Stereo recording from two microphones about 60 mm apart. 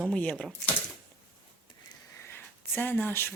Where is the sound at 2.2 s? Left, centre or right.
Left.